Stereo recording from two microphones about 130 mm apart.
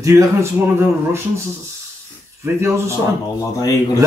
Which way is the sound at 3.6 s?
25° left (ahead or behind).